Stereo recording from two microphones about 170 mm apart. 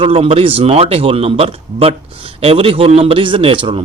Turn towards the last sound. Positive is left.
turn(degrees=-30)  # may be behind; listen again after turning